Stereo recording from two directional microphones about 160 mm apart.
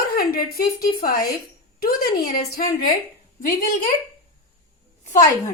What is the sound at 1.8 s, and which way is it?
Speech, 70° left (ahead or behind).